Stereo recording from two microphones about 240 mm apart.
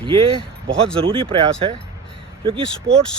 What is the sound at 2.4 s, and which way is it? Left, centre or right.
Speech, right.